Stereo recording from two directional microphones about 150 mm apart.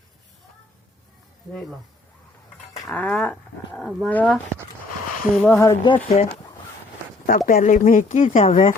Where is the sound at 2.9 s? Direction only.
10° left (ahead or behind).